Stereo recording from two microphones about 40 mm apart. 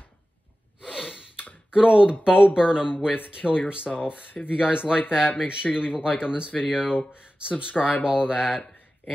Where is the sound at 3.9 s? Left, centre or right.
Left.